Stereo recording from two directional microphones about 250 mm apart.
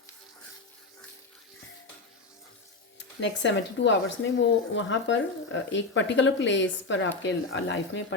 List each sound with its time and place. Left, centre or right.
3.2 s speech: left